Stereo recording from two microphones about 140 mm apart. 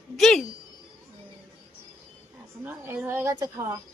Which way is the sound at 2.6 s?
15° right (ahead or behind).